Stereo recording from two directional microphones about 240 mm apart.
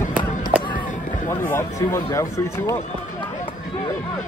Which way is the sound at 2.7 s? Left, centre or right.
Left.